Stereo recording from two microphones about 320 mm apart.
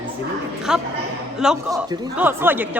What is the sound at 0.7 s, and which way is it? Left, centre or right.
Speech, centre.